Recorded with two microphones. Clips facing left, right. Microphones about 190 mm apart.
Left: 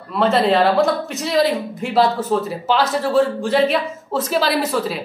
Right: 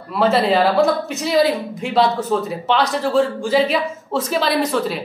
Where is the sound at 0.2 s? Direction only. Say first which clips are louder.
Even; centre (ahead or behind).